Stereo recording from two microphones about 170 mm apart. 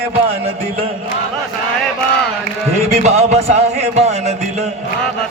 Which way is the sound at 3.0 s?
40° right (ahead or behind).